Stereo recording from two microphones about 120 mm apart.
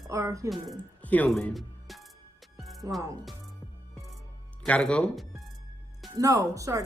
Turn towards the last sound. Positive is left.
turn(degrees=-25)  # may be behind; listen again after turning